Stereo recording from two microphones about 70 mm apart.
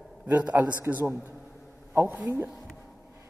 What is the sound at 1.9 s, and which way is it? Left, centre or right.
Speech, right.